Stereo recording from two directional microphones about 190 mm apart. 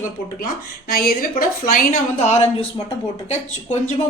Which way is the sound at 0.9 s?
50° left (ahead or behind).